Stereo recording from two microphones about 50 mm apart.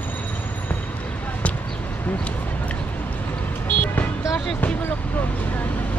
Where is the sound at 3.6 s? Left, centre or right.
Left.